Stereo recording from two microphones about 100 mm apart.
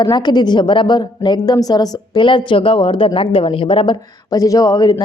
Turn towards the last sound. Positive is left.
turn(degrees=40)  # may be behind; listen again after turning